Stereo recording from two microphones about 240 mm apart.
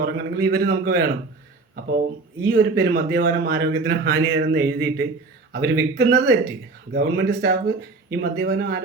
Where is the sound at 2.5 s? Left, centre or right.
Right.